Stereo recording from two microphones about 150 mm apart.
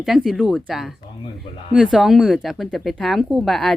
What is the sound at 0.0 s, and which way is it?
Speech, centre (ahead or behind).